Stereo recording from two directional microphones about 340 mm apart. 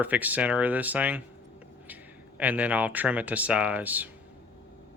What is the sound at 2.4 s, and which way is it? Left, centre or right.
Speech, centre.